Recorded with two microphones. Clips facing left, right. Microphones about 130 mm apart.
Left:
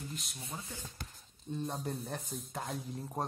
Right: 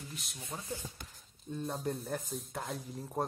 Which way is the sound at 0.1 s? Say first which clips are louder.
Left 2 dB; centre (ahead or behind).